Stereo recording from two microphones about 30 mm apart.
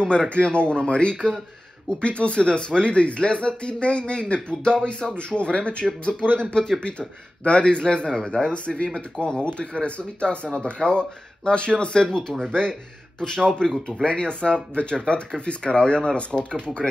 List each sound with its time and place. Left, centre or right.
0.0 s speech: left
13.2 s speech: left